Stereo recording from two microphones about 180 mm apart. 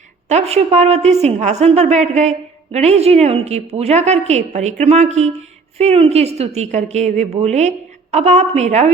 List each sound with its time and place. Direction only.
0.3 s a woman's voice: 35° right (ahead or behind)